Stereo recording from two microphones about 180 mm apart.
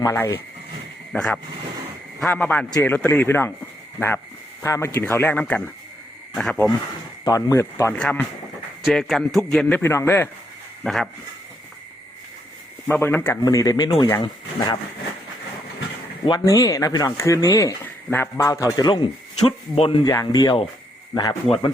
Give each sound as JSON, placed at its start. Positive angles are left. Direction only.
{"t": 0.0, "sound": "speech", "side_deg": 15}
{"t": 1.1, "sound": "speech", "side_deg": 5}
{"t": 4.6, "sound": "a man's voice", "side_deg": 15}
{"t": 7.3, "sound": "a man's voice", "side_deg": 20}
{"t": 10.8, "sound": "a man's voice", "side_deg": 0}
{"t": 12.9, "sound": "speech", "side_deg": 10}
{"t": 16.2, "sound": "speech", "side_deg": 20}
{"t": 19.4, "sound": "speech", "side_deg": 30}
{"t": 20.1, "sound": "speech", "side_deg": 20}